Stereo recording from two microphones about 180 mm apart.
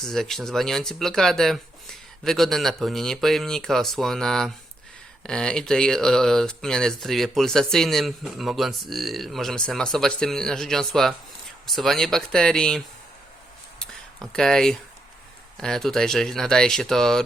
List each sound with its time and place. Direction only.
0.0 s speech: centre (ahead or behind)
13.7 s a sound: 5° left (ahead or behind)
15.5 s speech: 5° left (ahead or behind)